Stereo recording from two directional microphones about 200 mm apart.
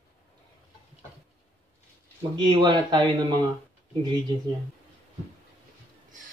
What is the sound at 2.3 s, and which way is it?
Speech, 25° right (ahead or behind).